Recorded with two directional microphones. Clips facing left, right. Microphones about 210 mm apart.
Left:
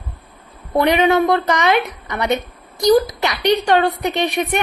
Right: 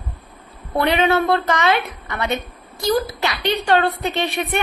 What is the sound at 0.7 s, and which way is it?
A woman's voice, 15° left (ahead or behind).